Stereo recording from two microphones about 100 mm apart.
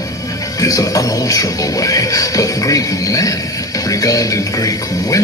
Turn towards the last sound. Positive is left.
turn(degrees=35)  # may be behind; listen again after turning